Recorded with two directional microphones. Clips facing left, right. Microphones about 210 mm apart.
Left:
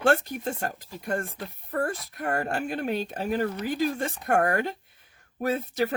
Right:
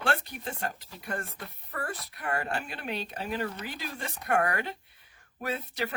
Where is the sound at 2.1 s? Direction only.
45° left (ahead or behind).